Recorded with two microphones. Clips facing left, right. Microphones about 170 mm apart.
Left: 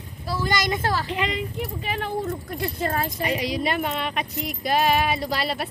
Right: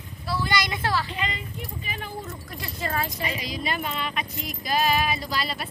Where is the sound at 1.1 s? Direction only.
75° left (ahead or behind).